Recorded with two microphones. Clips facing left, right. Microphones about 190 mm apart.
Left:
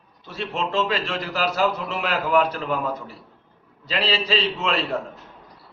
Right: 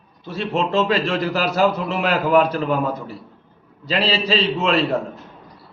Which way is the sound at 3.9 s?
35° right (ahead or behind).